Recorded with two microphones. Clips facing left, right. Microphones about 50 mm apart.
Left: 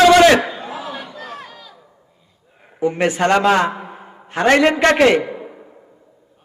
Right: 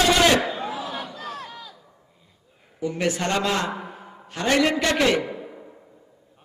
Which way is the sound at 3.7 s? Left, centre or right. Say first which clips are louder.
Left 5 dB; left.